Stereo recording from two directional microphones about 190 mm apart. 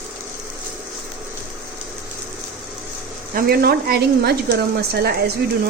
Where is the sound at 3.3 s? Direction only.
55° right (ahead or behind).